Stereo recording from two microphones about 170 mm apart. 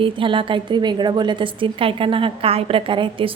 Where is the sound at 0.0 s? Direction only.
30° right (ahead or behind).